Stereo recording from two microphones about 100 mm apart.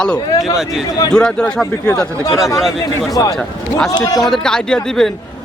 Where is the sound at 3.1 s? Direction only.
35° left (ahead or behind).